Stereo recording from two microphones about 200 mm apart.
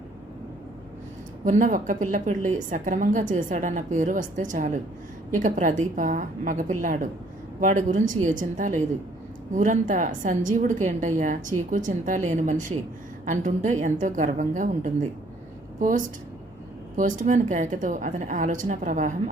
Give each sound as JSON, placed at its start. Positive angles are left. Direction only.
{"t": 1.5, "sound": "a woman's voice", "side_deg": -40}